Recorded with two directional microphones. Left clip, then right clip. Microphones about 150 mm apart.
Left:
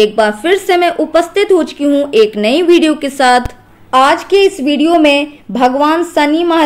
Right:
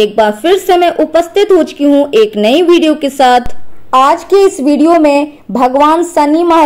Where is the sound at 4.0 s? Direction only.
35° right (ahead or behind).